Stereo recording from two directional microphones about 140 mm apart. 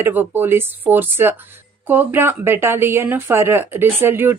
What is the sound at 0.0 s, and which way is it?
A woman's voice, 15° right (ahead or behind).